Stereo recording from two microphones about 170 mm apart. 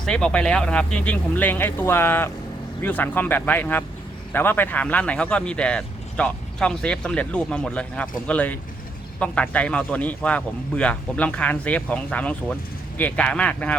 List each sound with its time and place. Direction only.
0.0 s a man's voice: 5° left (ahead or behind)